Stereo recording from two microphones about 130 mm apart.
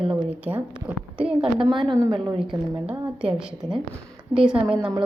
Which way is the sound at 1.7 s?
40° right (ahead or behind).